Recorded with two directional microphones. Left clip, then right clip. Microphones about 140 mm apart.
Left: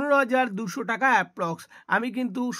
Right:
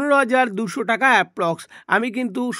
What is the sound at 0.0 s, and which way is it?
Speech, 30° right (ahead or behind).